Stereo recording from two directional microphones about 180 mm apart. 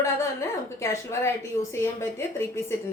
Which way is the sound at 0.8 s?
15° left (ahead or behind).